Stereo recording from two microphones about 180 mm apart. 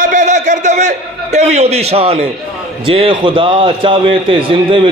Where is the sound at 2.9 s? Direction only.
30° right (ahead or behind).